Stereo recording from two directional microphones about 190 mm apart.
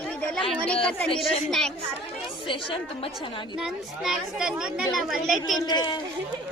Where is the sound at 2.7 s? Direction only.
30° left (ahead or behind).